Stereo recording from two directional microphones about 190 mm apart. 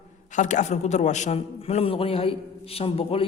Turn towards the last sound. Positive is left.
turn(degrees=30)  # may be behind; listen again after turning